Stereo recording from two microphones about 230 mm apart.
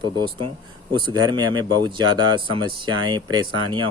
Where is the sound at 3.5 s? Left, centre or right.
Right.